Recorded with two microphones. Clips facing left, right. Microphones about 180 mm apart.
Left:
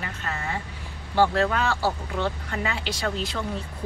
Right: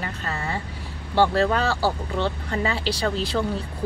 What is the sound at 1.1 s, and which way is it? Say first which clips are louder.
Speech: right 2 dB; 35° right (ahead or behind).